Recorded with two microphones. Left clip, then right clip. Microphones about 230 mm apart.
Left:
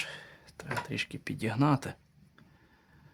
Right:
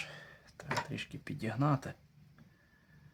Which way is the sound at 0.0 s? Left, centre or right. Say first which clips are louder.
Left 6 dB; left.